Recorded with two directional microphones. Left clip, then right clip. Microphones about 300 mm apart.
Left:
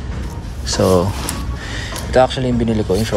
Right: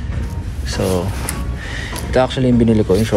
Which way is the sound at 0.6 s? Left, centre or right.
Centre.